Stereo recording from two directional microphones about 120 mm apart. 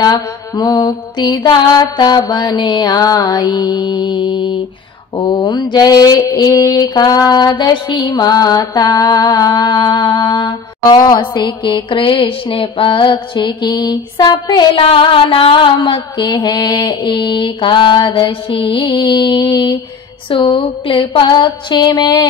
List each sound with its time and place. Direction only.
0.0 s mantra: 35° left (ahead or behind)